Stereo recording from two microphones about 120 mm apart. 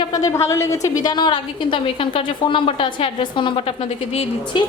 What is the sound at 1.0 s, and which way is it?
A woman's voice, 40° left (ahead or behind).